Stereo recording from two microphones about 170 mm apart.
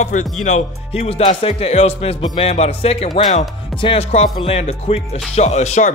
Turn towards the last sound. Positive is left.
turn(degrees=40)  # may be behind; listen again after turning